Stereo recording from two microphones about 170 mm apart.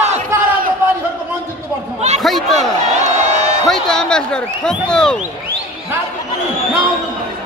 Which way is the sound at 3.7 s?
5° left (ahead or behind).